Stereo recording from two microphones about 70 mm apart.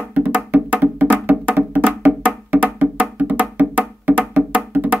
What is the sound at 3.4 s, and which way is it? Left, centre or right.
Music, right.